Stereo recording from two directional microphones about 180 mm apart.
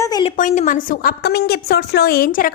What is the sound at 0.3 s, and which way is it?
A woman's voice, 45° left (ahead or behind).